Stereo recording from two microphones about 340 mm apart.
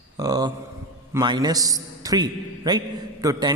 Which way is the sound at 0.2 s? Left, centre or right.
Centre.